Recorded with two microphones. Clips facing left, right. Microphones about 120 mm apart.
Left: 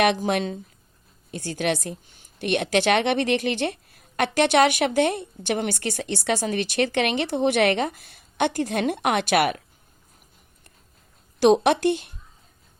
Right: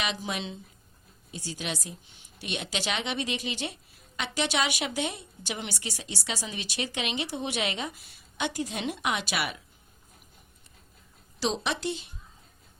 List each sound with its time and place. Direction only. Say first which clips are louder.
0.0 s a woman's voice: left 12 dB; 55° left (ahead or behind)
11.3 s a woman's voice: left 13 dB; 60° left (ahead or behind)